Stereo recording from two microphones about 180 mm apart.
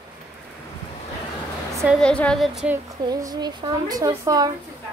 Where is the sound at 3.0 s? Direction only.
20° right (ahead or behind).